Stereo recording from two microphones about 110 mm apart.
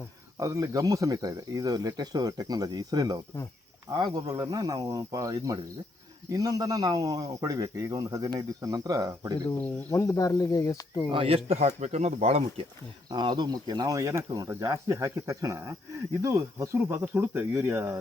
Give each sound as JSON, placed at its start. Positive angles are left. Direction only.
{"t": 0.3, "sound": "speech", "side_deg": -30}
{"t": 9.9, "sound": "speech", "side_deg": 30}
{"t": 11.1, "sound": "speech", "side_deg": -60}
{"t": 11.8, "sound": "speech", "side_deg": -85}
{"t": 13.1, "sound": "speech", "side_deg": -40}